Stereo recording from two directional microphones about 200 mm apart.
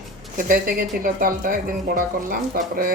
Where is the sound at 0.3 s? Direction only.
45° right (ahead or behind).